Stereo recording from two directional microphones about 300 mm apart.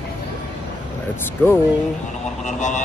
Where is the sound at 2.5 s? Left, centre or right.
Left.